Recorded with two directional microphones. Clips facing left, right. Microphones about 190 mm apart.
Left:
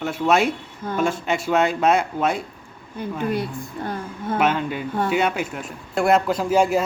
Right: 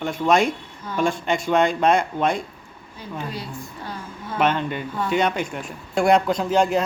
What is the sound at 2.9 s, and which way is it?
A woman's voice, 55° left (ahead or behind).